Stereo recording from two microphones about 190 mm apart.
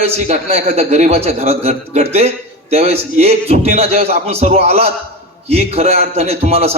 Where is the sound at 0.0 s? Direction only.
35° right (ahead or behind).